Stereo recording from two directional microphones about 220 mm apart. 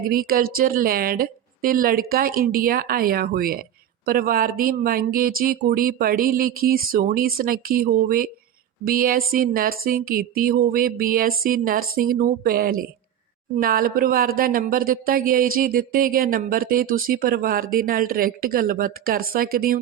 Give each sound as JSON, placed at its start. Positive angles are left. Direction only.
{"t": 0.1, "sound": "speech", "side_deg": -40}